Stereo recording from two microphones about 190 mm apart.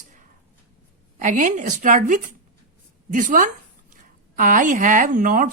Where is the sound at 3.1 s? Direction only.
45° right (ahead or behind).